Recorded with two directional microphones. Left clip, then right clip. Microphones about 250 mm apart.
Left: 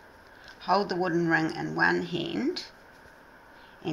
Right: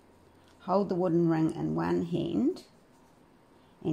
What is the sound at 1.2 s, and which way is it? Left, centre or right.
Speech, right.